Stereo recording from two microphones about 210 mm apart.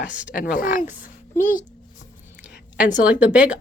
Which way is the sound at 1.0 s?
40° left (ahead or behind).